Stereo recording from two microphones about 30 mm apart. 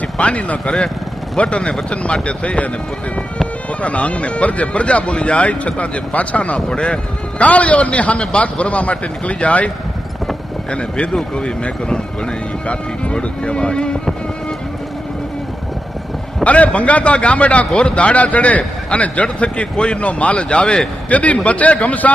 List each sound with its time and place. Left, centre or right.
0.2 s a man's voice: left
3.8 s a man's voice: left
6.7 s a man's voice: left
13.1 s speech: left
16.4 s a man's voice: left
17.7 s a man's voice: left
19.2 s speech: left
20.1 s a man's voice: left
21.1 s a man's voice: left